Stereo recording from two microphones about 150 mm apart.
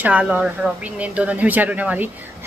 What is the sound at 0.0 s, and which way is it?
A woman's voice, 10° right (ahead or behind).